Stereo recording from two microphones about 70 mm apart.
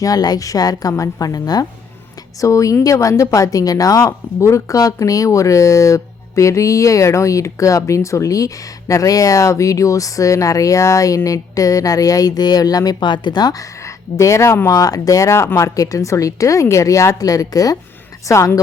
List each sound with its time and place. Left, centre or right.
0.0 s a woman's voice: left
2.4 s speech: left
4.0 s speech: left
14.7 s speech: left